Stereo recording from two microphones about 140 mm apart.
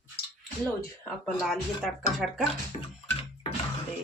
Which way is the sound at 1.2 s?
Centre (ahead or behind).